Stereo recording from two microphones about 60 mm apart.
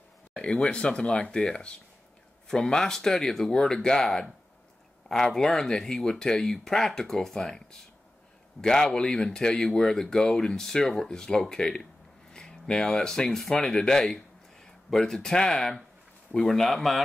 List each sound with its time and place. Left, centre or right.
0.4 s speech: centre